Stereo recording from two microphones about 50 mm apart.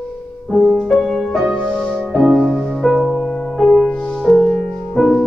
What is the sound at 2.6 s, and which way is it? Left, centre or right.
Music, centre.